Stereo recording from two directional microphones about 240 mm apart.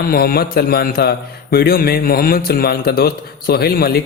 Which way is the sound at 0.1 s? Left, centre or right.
Left.